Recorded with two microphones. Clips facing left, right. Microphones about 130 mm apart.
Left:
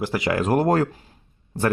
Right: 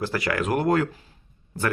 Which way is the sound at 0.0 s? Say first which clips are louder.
Left 3 dB; 20° left (ahead or behind).